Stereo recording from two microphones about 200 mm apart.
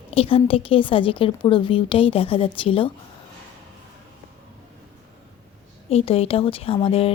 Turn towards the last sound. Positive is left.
turn(degrees=30)  # may be behind; listen again after turning